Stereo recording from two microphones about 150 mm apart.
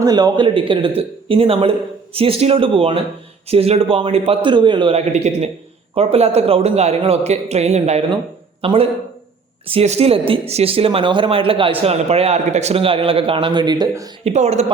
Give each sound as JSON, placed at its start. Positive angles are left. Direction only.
{"t": 0.0, "sound": "a man's voice", "side_deg": -25}
{"t": 8.6, "sound": "speech", "side_deg": -35}
{"t": 14.3, "sound": "a man's voice", "side_deg": -45}